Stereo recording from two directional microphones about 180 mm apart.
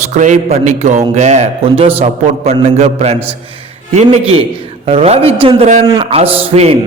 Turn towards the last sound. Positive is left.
turn(degrees=-35)  # may be behind; listen again after turning